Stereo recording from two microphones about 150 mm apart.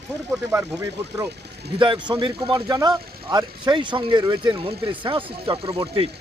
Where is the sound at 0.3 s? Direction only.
15° right (ahead or behind).